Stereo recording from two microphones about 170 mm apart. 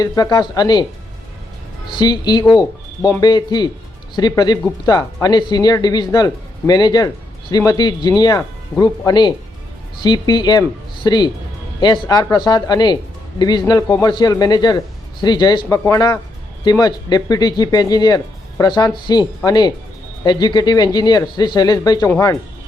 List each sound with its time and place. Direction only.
0.0 s speech: 25° left (ahead or behind)
2.0 s speech: 25° left (ahead or behind)